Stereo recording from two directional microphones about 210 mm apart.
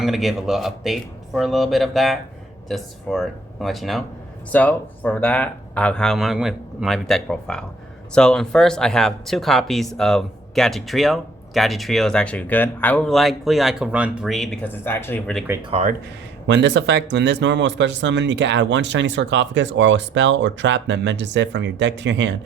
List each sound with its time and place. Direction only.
0.0 s speech: centre (ahead or behind)
15.7 s speech: 35° right (ahead or behind)
16.5 s speech: 55° right (ahead or behind)